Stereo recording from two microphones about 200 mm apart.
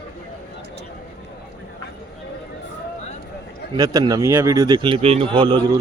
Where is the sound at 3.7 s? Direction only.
20° right (ahead or behind).